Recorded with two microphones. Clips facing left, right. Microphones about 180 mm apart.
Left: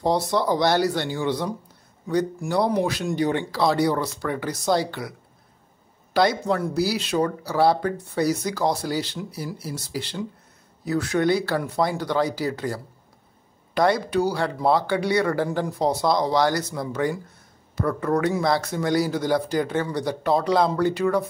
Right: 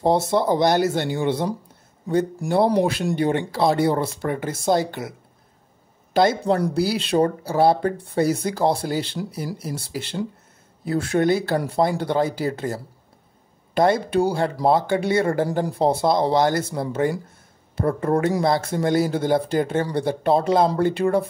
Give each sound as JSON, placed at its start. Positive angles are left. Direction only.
{"t": 0.1, "sound": "speech", "side_deg": -25}
{"t": 4.6, "sound": "speech", "side_deg": -50}
{"t": 6.1, "sound": "speech", "side_deg": -25}
{"t": 6.5, "sound": "speech", "side_deg": -40}
{"t": 8.9, "sound": "speech", "side_deg": -55}
{"t": 9.8, "sound": "speech", "side_deg": -30}
{"t": 11.2, "sound": "speech", "side_deg": -25}
{"t": 15.4, "sound": "speech", "side_deg": -35}